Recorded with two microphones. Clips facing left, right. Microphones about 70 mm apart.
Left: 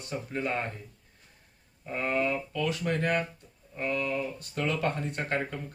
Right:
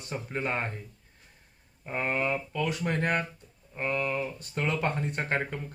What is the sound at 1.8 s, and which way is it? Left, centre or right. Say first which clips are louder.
Speech: left 1 dB; right.